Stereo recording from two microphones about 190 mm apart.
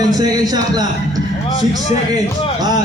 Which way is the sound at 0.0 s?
20° right (ahead or behind).